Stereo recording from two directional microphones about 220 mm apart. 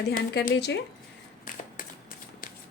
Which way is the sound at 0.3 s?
50° left (ahead or behind).